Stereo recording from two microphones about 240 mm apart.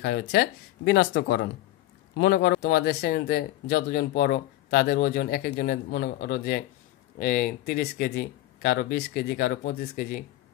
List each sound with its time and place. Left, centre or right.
0.0 s speech: left